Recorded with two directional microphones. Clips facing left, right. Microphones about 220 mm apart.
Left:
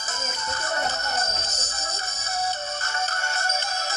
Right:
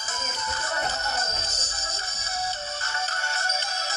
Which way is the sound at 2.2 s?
50° left (ahead or behind).